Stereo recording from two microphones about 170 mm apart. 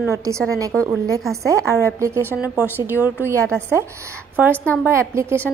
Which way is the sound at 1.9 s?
15° right (ahead or behind).